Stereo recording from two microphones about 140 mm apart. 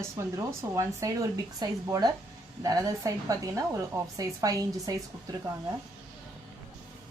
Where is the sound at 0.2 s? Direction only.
20° right (ahead or behind).